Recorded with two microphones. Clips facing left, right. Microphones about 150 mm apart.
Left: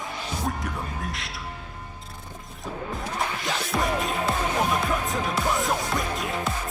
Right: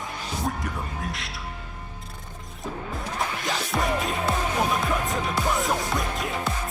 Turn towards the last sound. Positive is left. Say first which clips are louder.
# even
turn(degrees=0)  # may be behind; listen again after turning